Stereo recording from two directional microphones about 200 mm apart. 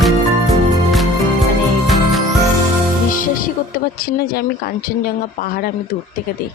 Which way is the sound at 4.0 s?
50° left (ahead or behind).